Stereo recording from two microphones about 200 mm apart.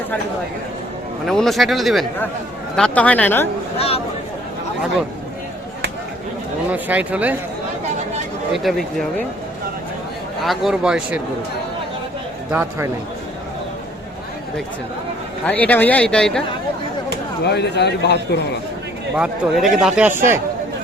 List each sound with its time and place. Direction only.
1.3 s a man's voice: centre (ahead or behind)
3.8 s speech: 30° left (ahead or behind)
6.7 s speech: 10° right (ahead or behind)
8.5 s speech: centre (ahead or behind)
10.4 s speech: centre (ahead or behind)
12.5 s speech: 10° right (ahead or behind)
15.4 s a man's voice: 10° left (ahead or behind)
17.4 s a man's voice: 55° left (ahead or behind)
19.1 s speech: 5° right (ahead or behind)